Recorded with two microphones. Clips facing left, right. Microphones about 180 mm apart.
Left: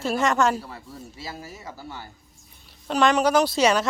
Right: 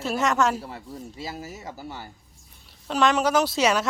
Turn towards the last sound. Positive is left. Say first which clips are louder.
# left 2 dB
turn(degrees=-5)  # may be behind; listen again after turning